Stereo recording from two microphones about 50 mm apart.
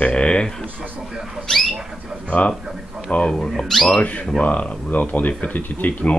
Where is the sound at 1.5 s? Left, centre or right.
Centre.